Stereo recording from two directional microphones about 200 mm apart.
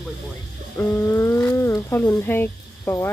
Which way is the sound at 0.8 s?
10° left (ahead or behind).